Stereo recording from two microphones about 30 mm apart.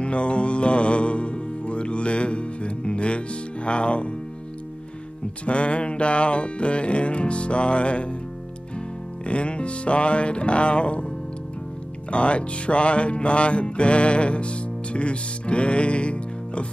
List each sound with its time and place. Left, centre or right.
0.0 s music: left
5.4 s music: left
12.1 s music: left